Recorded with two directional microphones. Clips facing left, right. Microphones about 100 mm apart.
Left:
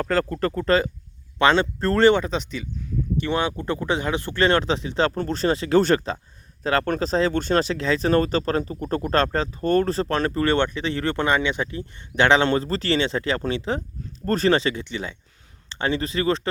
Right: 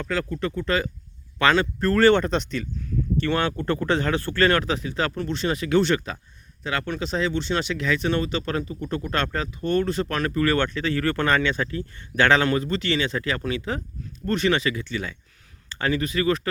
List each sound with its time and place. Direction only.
0.0 s speech: 40° left (ahead or behind)
2.0 s speech: 5° left (ahead or behind); by 16.5 s 30° left (ahead or behind)